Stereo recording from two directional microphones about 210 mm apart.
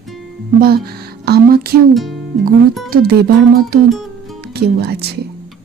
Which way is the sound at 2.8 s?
45° right (ahead or behind).